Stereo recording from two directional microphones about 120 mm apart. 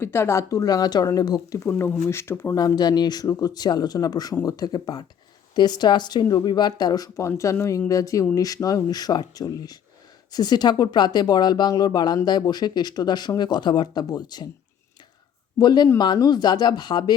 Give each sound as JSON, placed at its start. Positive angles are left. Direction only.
{"t": 0.0, "sound": "speech", "side_deg": 20}
{"t": 2.6, "sound": "speech", "side_deg": 35}
{"t": 15.5, "sound": "speech", "side_deg": 35}